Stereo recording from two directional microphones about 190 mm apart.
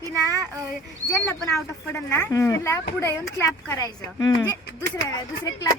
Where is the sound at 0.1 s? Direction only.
15° right (ahead or behind).